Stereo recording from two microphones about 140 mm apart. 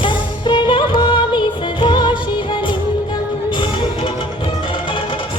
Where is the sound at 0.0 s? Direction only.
35° left (ahead or behind).